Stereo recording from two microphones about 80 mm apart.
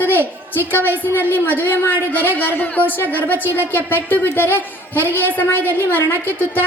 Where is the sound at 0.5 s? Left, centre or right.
Left.